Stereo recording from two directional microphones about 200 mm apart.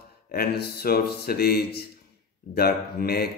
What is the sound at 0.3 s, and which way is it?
Speech, 50° left (ahead or behind).